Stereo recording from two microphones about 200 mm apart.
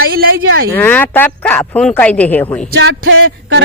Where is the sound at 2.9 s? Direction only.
75° right (ahead or behind).